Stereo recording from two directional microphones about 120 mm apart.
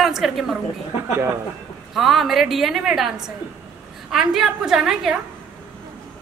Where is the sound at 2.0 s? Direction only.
Centre (ahead or behind).